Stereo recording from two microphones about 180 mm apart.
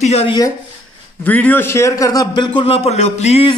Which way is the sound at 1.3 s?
10° left (ahead or behind).